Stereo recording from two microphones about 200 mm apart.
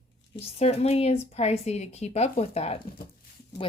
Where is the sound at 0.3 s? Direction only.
30° left (ahead or behind).